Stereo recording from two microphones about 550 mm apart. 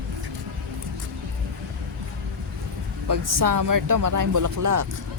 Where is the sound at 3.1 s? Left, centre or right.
Right.